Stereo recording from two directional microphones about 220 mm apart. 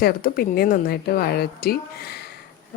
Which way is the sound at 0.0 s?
45° left (ahead or behind).